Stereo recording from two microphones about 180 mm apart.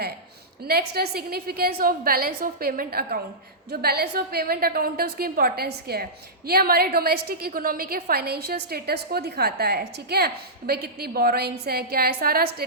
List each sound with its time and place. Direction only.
0.6 s a woman's voice: 60° right (ahead or behind)